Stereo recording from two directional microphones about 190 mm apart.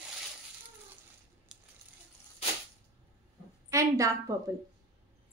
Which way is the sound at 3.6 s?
15° right (ahead or behind).